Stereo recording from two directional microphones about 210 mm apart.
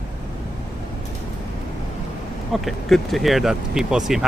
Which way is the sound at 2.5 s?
Centre (ahead or behind).